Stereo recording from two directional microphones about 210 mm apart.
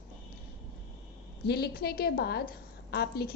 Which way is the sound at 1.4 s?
50° left (ahead or behind).